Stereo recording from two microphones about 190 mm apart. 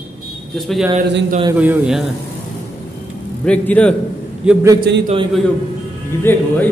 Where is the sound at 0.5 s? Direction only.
Centre (ahead or behind).